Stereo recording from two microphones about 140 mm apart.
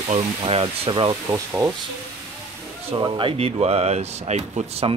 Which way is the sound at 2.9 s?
35° right (ahead or behind).